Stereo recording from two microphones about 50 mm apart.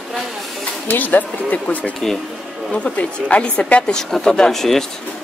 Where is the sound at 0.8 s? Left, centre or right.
Left.